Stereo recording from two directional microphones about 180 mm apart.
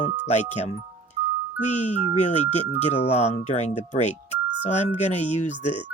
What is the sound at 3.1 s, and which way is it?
Speech, 35° left (ahead or behind).